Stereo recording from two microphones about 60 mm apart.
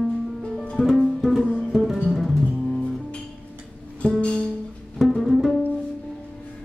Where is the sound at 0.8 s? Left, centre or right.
Centre.